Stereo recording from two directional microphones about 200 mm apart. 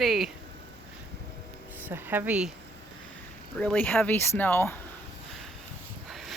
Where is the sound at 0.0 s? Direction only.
Centre (ahead or behind).